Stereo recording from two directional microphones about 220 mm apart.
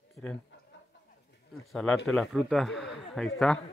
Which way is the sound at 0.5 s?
55° left (ahead or behind).